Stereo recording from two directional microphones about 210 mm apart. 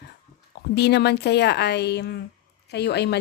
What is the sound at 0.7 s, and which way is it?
A woman's voice, 50° left (ahead or behind).